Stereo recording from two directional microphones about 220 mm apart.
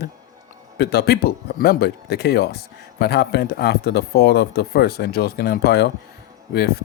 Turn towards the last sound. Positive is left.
turn(degrees=45)  # may be behind; listen again after turning